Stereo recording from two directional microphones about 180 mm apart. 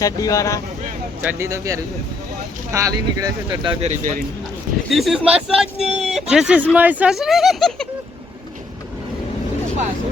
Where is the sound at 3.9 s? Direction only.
45° right (ahead or behind).